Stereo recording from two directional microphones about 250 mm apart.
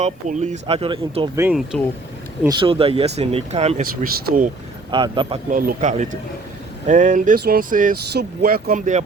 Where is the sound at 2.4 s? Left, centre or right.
Centre.